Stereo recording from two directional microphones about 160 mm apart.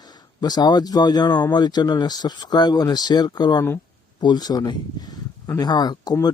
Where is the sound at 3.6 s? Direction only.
15° left (ahead or behind).